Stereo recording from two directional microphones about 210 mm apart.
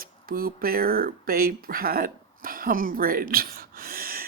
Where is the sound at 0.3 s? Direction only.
45° right (ahead or behind).